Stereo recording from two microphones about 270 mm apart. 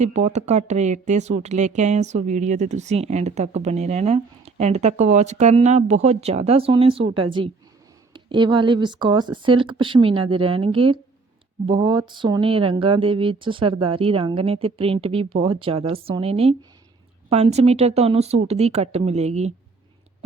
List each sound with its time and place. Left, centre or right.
0.0 s speech: right